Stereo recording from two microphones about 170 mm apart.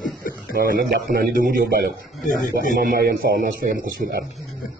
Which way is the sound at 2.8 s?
55° right (ahead or behind).